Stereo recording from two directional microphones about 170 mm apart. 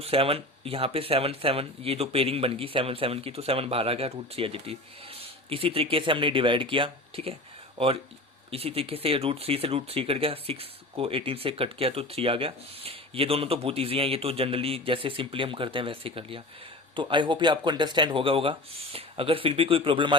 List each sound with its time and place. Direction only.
0.0 s speech: 35° right (ahead or behind)
8.4 s speech: 35° right (ahead or behind)